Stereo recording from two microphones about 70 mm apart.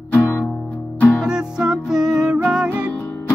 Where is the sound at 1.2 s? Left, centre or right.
Centre.